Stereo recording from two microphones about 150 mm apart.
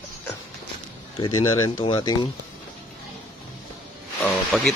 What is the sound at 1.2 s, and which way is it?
Speech, 20° left (ahead or behind).